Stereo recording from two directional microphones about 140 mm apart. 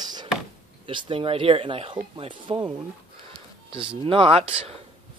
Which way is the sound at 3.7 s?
40° right (ahead or behind).